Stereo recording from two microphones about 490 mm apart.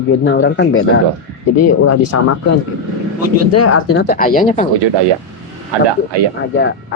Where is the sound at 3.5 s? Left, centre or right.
Left.